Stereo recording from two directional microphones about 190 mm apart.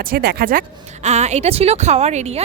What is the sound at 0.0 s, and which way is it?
Speech, 55° right (ahead or behind).